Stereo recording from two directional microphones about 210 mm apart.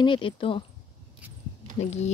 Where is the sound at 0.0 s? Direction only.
25° left (ahead or behind).